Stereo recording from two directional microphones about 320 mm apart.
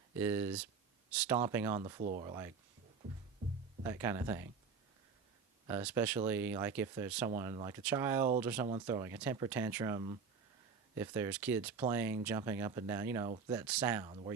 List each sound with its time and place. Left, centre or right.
0.2 s speech: centre
2.0 s speech: right
3.8 s speech: centre
5.6 s speech: centre